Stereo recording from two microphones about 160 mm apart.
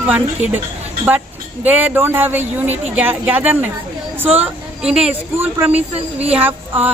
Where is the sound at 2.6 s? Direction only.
45° right (ahead or behind).